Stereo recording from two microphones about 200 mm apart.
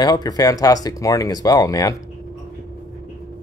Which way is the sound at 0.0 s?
20° left (ahead or behind).